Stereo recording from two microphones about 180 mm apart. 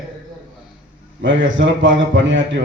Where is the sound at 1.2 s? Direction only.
90° right.